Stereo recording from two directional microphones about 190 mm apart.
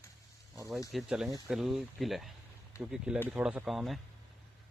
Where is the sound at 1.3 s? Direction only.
20° right (ahead or behind).